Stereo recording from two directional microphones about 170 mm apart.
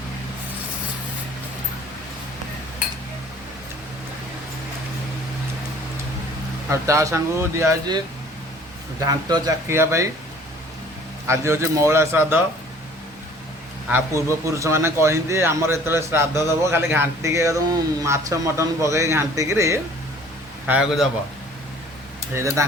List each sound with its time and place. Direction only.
6.7 s a man's voice: 15° right (ahead or behind)
11.3 s a man's voice: 15° right (ahead or behind)
13.9 s a man's voice: 15° right (ahead or behind)
20.7 s a man's voice: 5° right (ahead or behind)
22.4 s a man's voice: 15° right (ahead or behind)